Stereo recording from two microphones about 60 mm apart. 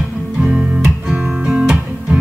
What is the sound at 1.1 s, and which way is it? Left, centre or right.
Guitar, centre.